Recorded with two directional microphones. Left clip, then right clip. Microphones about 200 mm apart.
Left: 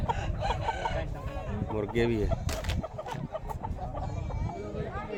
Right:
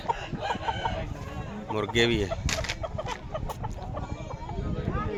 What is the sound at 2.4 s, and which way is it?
Chicken, 25° left (ahead or behind).